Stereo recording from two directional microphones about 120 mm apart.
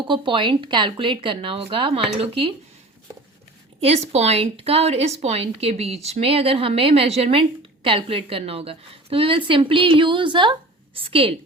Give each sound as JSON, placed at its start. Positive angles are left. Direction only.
{"t": 0.1, "sound": "a woman's voice", "side_deg": -45}
{"t": 3.8, "sound": "a woman's voice", "side_deg": -60}